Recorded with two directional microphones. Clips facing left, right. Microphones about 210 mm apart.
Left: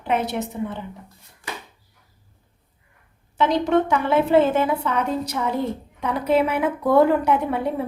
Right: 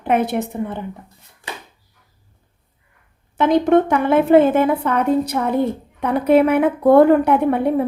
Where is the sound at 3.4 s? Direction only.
50° right (ahead or behind).